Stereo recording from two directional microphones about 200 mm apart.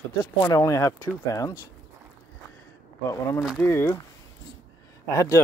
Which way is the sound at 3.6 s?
10° left (ahead or behind).